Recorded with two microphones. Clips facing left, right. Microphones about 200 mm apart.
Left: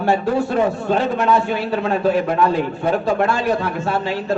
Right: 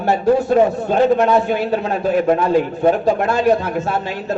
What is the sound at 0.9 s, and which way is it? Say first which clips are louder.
A man's voice: right 4 dB; 45° right (ahead or behind).